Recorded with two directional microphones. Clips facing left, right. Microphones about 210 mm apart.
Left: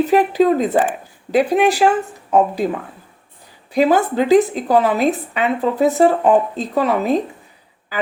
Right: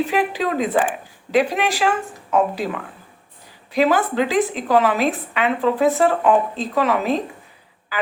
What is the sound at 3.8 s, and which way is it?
Speech, 40° left (ahead or behind).